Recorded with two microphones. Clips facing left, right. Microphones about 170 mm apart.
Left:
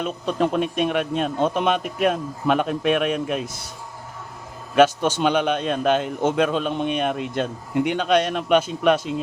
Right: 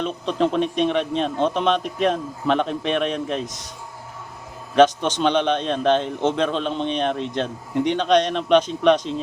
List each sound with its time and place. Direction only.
0.0 s a man's voice: 5° left (ahead or behind)
4.7 s a man's voice: 10° left (ahead or behind)